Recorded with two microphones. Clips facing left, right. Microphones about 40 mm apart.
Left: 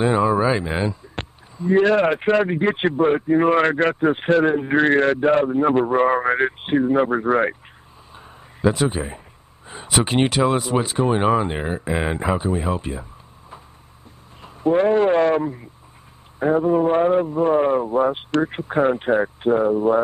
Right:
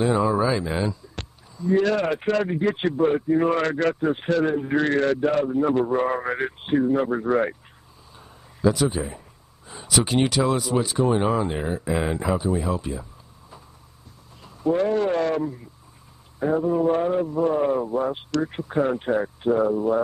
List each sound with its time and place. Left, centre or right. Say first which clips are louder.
0.0 s a man's voice: left 3 dB; left
8.1 s a sound: left 5 dB; left
9.7 s a man's voice: left 2 dB; left
14.4 s a man's voice: left 4 dB; left